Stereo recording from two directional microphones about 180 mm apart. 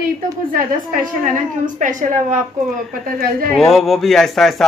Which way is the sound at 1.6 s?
45° right (ahead or behind).